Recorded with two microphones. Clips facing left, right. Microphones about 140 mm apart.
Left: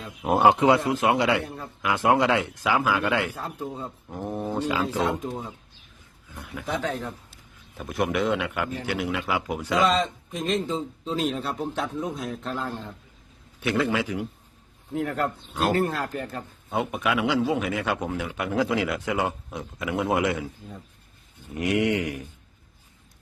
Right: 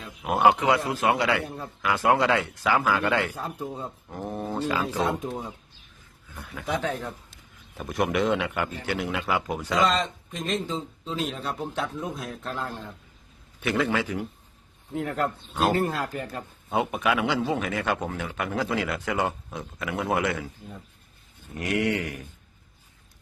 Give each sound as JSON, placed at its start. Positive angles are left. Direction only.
{"t": 0.3, "sound": "a man's voice", "side_deg": 30}
{"t": 1.5, "sound": "a man's voice", "side_deg": 0}
{"t": 1.8, "sound": "a man's voice", "side_deg": 20}
{"t": 5.1, "sound": "a man's voice", "side_deg": 0}